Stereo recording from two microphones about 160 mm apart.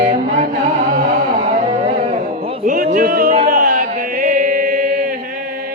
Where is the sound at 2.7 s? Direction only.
55° right (ahead or behind).